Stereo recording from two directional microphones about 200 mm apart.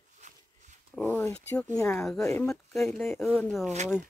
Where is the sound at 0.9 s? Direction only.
5° left (ahead or behind).